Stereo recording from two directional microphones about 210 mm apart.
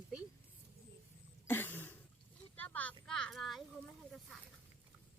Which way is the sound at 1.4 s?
10° left (ahead or behind).